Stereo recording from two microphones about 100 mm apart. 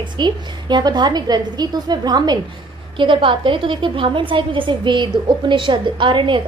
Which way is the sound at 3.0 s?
55° right (ahead or behind).